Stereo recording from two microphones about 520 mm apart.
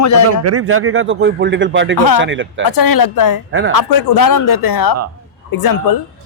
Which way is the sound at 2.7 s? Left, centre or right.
Left.